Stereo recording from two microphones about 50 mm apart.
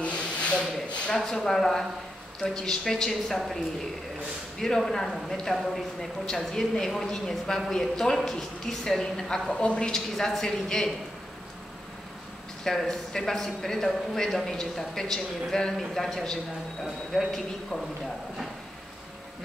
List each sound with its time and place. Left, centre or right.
0.0 s rub: left
1.1 s speech: centre
12.6 s speech: centre